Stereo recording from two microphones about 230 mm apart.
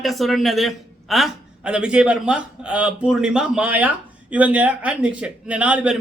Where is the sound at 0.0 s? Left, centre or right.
Centre.